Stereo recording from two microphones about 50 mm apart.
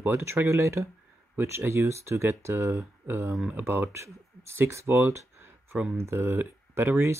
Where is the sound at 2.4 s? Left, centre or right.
Right.